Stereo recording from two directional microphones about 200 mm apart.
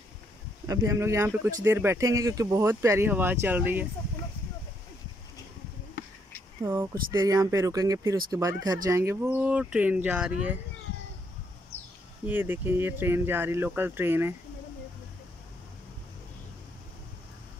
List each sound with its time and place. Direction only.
0.7 s speech: 15° right (ahead or behind)
6.6 s speech: 15° right (ahead or behind)
12.3 s speech: 10° right (ahead or behind)